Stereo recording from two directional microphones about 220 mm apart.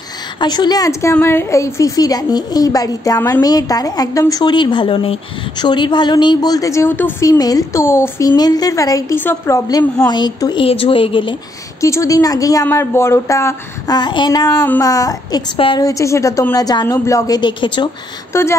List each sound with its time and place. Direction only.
0.4 s a woman's voice: 20° left (ahead or behind)